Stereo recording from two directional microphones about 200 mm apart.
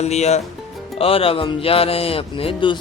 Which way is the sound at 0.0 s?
35° left (ahead or behind).